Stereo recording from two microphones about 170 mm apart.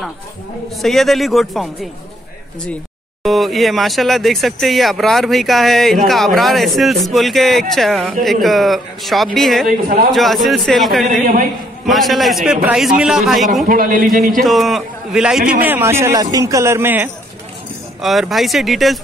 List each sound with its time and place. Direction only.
0.8 s speech: centre (ahead or behind)
3.3 s speech: centre (ahead or behind)
9.7 s a man's voice: 60° right (ahead or behind)
10.1 s speech: centre (ahead or behind)
11.2 s a man's voice: 50° right (ahead or behind)
11.9 s speech: centre (ahead or behind)
13.7 s a man's voice: 55° right (ahead or behind)
14.4 s speech: centre (ahead or behind)
18.0 s speech: centre (ahead or behind)